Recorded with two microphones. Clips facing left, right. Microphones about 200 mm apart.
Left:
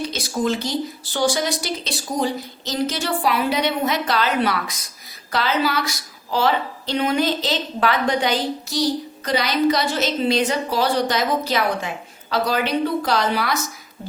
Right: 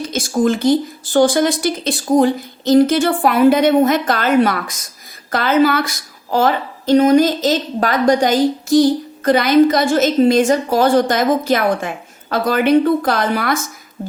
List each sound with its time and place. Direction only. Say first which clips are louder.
0.0 s a woman's voice: right 6 dB; 50° right (ahead or behind)